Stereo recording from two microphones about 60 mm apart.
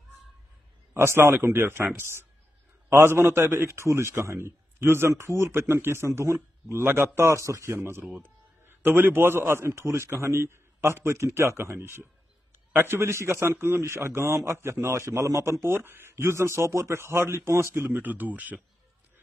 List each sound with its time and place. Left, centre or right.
0.9 s a man's voice: right
5.1 s a man's voice: right
7.2 s a man's voice: right
15.6 s a man's voice: right
17.8 s speech: right